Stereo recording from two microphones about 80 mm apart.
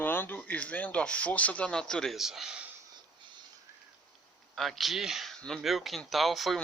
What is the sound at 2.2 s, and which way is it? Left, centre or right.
Speech, centre.